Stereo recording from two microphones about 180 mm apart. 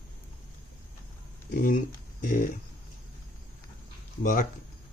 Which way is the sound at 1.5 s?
60° left (ahead or behind).